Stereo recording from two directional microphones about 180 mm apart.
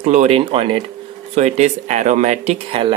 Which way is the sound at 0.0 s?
40° right (ahead or behind).